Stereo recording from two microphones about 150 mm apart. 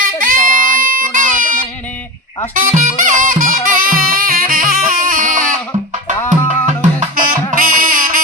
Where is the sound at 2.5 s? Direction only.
60° right (ahead or behind).